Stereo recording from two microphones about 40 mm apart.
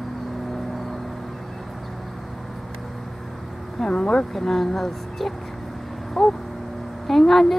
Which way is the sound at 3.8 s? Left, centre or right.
Centre.